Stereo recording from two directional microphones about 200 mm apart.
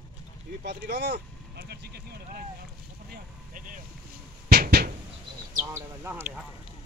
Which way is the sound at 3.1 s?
40° right (ahead or behind).